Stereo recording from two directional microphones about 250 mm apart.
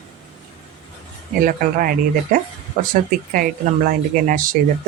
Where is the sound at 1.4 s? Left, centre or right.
Right.